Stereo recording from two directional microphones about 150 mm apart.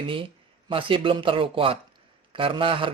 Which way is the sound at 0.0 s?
35° right (ahead or behind).